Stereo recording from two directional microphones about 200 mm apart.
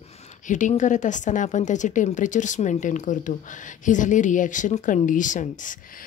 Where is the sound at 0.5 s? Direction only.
40° left (ahead or behind).